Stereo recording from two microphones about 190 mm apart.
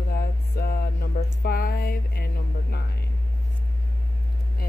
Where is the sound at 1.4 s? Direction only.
50° left (ahead or behind).